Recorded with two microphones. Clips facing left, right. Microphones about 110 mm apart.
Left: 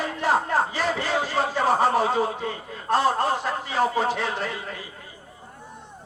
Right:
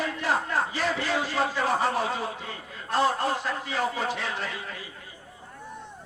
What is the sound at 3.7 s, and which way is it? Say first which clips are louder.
Music: left 7 dB; 35° left (ahead or behind).